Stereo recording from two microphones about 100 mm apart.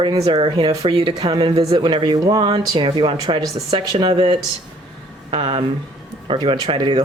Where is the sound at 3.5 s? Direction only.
80° right.